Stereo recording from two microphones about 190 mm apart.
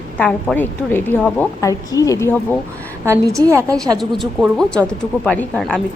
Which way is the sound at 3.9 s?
Centre (ahead or behind).